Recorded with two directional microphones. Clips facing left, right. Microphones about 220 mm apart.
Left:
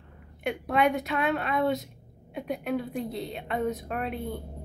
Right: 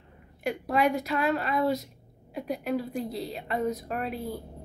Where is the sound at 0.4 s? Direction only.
Centre (ahead or behind).